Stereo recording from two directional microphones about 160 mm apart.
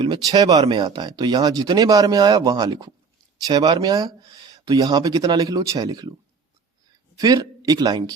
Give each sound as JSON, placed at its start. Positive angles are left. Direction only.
{"t": 0.3, "sound": "speech", "side_deg": -25}
{"t": 7.2, "sound": "speech", "side_deg": -25}